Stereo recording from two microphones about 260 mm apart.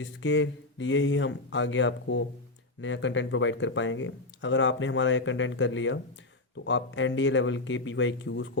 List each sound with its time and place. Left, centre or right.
0.0 s speech: left